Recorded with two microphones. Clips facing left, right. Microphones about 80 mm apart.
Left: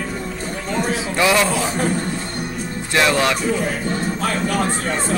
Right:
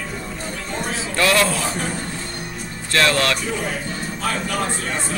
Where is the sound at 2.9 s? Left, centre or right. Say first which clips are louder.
Left 1 dB; centre.